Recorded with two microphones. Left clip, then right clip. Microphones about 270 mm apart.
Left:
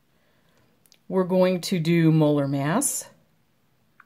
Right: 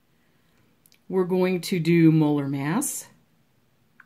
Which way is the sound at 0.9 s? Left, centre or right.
Left.